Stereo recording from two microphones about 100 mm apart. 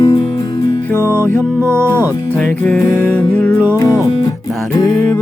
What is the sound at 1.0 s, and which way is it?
Music, 25° right (ahead or behind).